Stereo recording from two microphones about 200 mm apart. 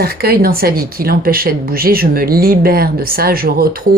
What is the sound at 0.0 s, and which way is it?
Speech, 50° right (ahead or behind).